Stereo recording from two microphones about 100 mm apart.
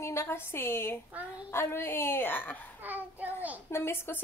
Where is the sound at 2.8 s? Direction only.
15° right (ahead or behind).